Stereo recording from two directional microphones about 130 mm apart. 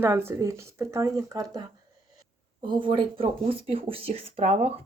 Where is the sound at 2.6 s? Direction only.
40° right (ahead or behind).